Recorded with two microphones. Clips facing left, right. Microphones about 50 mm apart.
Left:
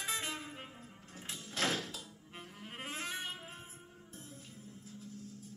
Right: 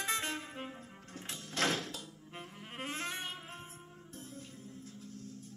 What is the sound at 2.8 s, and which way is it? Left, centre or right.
Saxophone, right.